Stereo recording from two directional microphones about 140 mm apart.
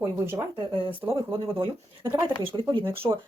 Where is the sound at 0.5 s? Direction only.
40° right (ahead or behind).